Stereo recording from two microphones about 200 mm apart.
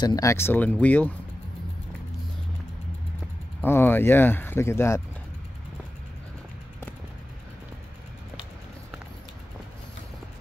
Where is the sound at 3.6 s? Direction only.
10° left (ahead or behind).